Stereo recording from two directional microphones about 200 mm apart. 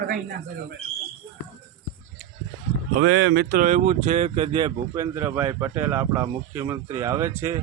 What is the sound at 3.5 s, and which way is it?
Speech, 40° right (ahead or behind).